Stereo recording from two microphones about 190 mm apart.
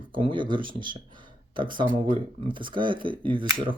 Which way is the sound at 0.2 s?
25° right (ahead or behind).